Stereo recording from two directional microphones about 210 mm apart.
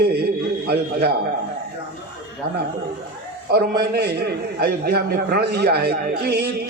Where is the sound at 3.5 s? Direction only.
50° right (ahead or behind).